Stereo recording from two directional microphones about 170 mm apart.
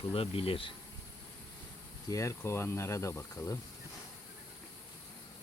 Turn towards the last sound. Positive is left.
turn(degrees=15)  # may be behind; listen again after turning